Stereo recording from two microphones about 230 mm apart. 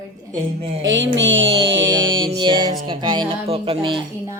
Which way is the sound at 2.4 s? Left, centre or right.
Centre.